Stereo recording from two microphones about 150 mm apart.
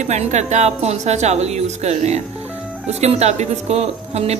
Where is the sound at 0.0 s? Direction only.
50° right (ahead or behind).